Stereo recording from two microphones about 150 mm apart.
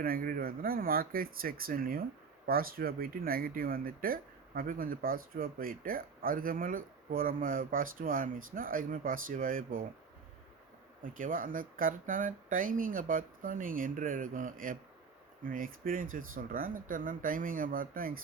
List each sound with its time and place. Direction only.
0.0 s speech: 75° right (ahead or behind)
11.0 s speech: 65° right (ahead or behind)